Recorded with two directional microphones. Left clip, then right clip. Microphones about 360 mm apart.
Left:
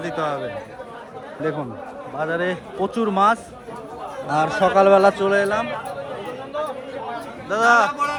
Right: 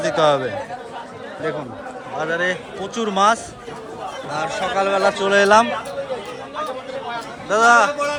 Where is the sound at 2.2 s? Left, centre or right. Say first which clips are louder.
Right 2 dB; centre.